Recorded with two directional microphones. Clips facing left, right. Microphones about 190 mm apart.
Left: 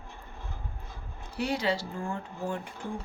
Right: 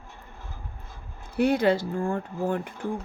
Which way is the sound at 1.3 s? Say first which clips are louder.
Right 8 dB; 55° right (ahead or behind).